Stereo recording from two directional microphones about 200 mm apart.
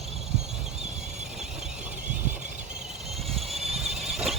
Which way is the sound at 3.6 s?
30° right (ahead or behind).